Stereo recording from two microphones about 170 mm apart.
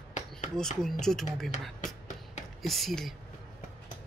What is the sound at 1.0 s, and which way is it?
Speech, 5° left (ahead or behind).